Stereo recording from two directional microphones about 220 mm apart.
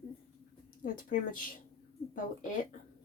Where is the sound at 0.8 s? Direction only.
40° left (ahead or behind).